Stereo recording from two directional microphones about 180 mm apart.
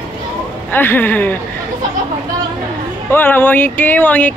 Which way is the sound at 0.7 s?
10° left (ahead or behind).